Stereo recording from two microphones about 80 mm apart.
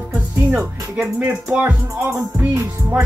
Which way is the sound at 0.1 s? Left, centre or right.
Right.